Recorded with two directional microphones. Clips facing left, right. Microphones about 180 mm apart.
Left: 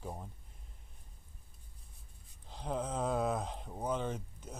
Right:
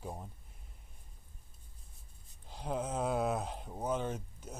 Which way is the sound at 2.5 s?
10° right (ahead or behind).